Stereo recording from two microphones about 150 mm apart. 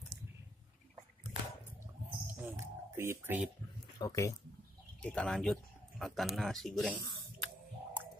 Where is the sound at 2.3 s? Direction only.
20° right (ahead or behind).